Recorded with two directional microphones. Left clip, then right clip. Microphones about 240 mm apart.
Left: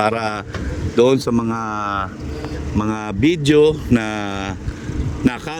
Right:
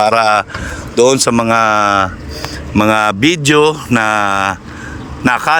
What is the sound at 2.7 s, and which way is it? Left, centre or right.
Speech, right.